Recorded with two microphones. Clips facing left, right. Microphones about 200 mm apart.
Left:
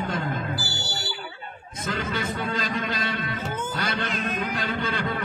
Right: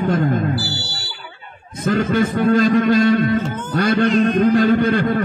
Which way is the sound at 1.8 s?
50° right (ahead or behind).